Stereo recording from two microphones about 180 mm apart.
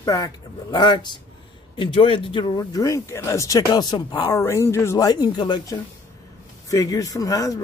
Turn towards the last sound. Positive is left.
turn(degrees=20)  # may be behind; listen again after turning